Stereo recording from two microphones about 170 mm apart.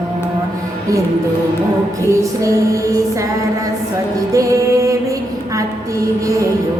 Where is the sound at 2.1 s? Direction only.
20° right (ahead or behind).